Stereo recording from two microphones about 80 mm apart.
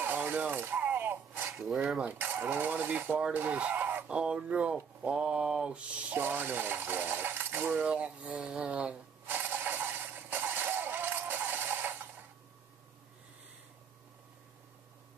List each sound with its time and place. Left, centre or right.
0.0 s a sound: right
1.6 s mantra: centre
2.1 s coin: right
3.3 s speech: right
4.1 s mantra: centre
6.1 s coin: right
9.3 s a sound: right